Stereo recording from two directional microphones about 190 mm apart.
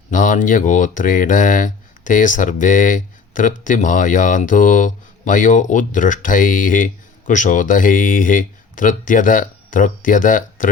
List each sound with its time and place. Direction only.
0.1 s speech: 45° left (ahead or behind)